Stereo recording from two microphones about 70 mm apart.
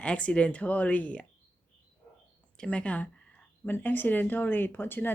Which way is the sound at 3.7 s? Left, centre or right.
Left.